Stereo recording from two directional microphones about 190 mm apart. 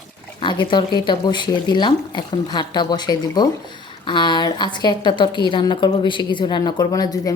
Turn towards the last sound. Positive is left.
turn(degrees=20)  # may be behind; listen again after turning